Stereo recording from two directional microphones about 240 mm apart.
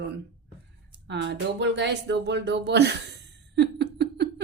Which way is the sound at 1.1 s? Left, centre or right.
Right.